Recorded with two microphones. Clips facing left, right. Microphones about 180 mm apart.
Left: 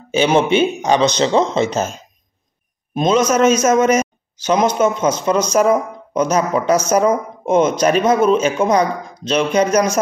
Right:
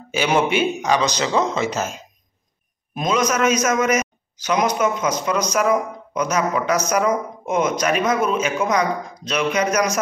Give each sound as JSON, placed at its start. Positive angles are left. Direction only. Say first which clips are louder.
{"t": 0.1, "sound": "a man's voice", "louder": "left 5 dB", "side_deg": 25}